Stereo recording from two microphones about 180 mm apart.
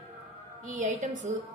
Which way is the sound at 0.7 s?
45° right (ahead or behind).